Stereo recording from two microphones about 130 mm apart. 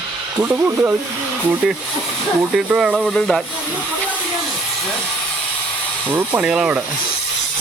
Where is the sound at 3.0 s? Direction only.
5° left (ahead or behind).